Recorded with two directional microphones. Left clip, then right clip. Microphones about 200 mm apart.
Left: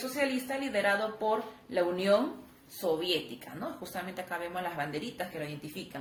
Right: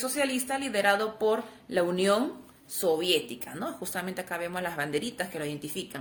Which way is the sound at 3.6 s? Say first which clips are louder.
Right 4 dB; 60° right (ahead or behind).